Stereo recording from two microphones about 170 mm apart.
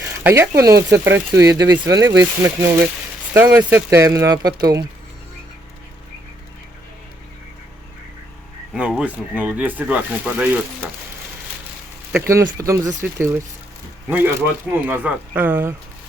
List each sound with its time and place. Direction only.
0.0 s speech: 15° right (ahead or behind)
8.7 s speech: 5° right (ahead or behind)
12.2 s speech: 15° right (ahead or behind)